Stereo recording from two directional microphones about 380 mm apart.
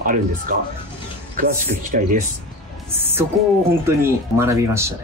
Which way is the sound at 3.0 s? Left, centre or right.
Centre.